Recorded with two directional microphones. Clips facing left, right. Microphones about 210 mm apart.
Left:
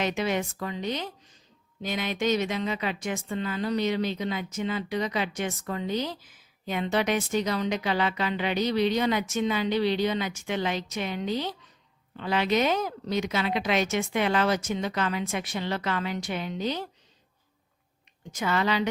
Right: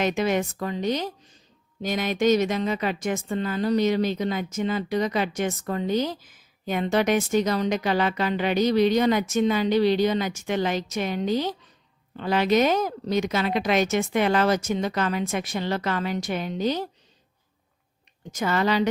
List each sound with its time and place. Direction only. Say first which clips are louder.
0.0 s a woman's voice: right 4 dB; 45° right (ahead or behind)
18.2 s speech: right 3 dB; 40° right (ahead or behind)